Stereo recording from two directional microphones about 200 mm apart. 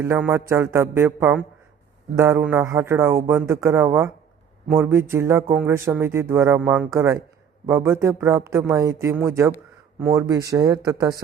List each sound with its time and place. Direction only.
0.0 s speech: 10° right (ahead or behind)